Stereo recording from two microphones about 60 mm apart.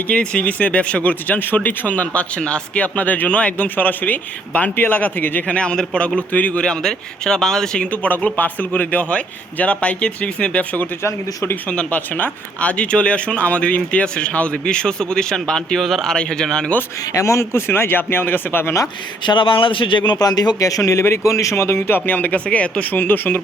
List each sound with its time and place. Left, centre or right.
0.1 s speech: left
6.7 s speech: centre
7.9 s speech: left
17.2 s speech: left
17.7 s speech: left
20.1 s a man's voice: left
21.2 s speech: left
21.5 s speech: left
22.4 s speech: centre